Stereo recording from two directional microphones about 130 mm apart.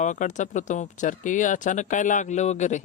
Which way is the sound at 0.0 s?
70° left (ahead or behind).